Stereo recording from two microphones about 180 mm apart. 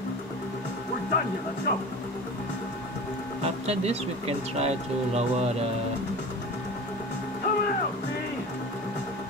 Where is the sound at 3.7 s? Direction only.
35° right (ahead or behind).